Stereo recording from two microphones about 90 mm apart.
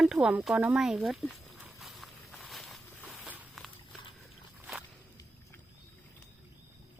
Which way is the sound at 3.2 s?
15° right (ahead or behind).